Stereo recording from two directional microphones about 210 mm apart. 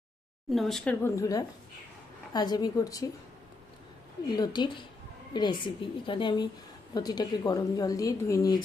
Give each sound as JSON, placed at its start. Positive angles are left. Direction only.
{"t": 0.5, "sound": "a woman's voice", "side_deg": 0}
{"t": 4.4, "sound": "a woman's voice", "side_deg": 20}